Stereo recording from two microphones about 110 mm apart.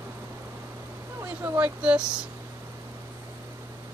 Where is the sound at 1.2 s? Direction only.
20° right (ahead or behind).